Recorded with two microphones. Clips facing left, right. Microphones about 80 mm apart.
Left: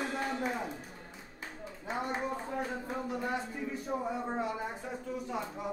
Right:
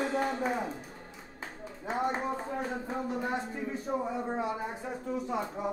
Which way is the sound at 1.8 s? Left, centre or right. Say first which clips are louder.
Right 4 dB; right.